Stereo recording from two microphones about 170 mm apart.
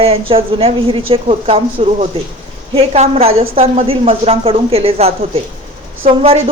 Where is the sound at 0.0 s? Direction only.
35° right (ahead or behind).